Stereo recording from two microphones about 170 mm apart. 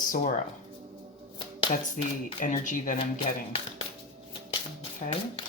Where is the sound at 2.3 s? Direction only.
45° left (ahead or behind).